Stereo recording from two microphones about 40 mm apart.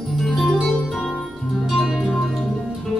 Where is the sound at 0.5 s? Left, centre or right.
Centre.